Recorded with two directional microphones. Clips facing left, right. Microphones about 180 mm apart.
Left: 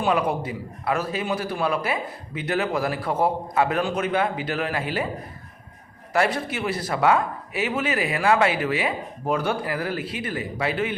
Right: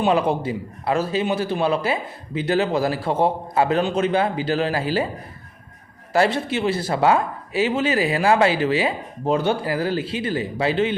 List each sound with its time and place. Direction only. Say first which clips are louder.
0.0 s a man's voice: right 3 dB; 25° right (ahead or behind)
6.1 s a man's voice: right 4 dB; 25° right (ahead or behind)